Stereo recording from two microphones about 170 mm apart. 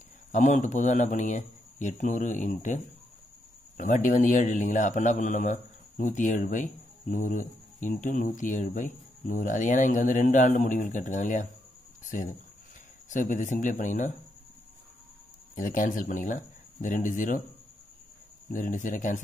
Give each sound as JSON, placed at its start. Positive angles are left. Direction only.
{"t": 0.3, "sound": "a man's voice", "side_deg": 45}
{"t": 15.5, "sound": "speech", "side_deg": 50}
{"t": 18.5, "sound": "a man's voice", "side_deg": 50}